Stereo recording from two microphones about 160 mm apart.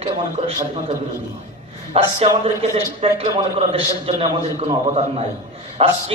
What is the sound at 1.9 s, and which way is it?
Speech, 40° right (ahead or behind).